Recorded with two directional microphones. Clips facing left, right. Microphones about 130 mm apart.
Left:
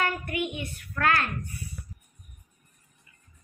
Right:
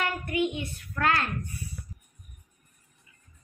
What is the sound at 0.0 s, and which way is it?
A child's voice, 25° right (ahead or behind).